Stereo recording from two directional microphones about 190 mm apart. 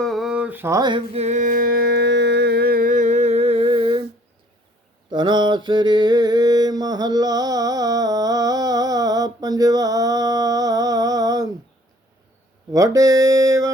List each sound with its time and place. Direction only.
0.0 s a sound: centre (ahead or behind); by 4.0 s 25° right (ahead or behind)
5.1 s mantra: 25° right (ahead or behind)
12.7 s music: 20° right (ahead or behind)